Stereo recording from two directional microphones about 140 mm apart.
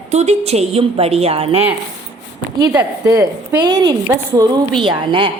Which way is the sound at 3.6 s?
30° right (ahead or behind).